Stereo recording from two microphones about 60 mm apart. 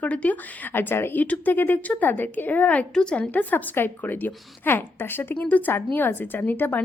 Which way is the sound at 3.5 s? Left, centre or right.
Left.